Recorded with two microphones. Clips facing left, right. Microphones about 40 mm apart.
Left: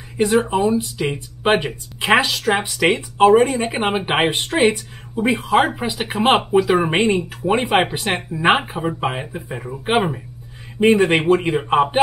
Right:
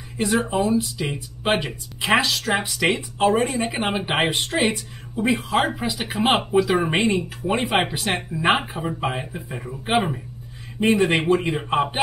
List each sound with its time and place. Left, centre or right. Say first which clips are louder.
0.2 s speech: left 5 dB; left
0.5 s speech: left 3 dB; centre
5.8 s speech: left 3 dB; left